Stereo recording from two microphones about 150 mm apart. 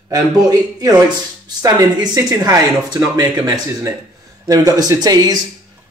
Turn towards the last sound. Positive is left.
turn(degrees=-25)  # may be behind; listen again after turning